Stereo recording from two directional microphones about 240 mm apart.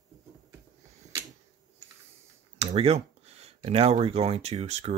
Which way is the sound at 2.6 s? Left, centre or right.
Right.